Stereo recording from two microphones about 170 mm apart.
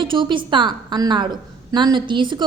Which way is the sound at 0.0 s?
30° right (ahead or behind).